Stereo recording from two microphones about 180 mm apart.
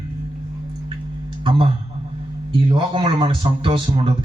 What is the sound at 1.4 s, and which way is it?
Speech, 30° right (ahead or behind).